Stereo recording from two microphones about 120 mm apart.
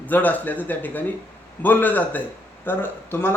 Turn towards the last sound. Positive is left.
turn(degrees=20)  # may be behind; listen again after turning